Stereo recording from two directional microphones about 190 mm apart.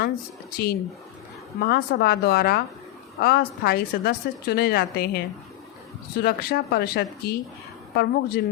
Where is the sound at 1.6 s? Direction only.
55° left (ahead or behind).